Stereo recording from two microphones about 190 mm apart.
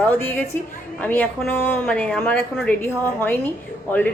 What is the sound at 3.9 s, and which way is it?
Speech, 10° left (ahead or behind).